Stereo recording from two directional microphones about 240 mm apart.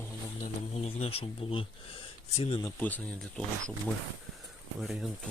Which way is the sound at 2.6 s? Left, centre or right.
Centre.